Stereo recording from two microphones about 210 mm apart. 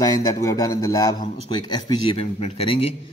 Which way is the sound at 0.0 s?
15° left (ahead or behind).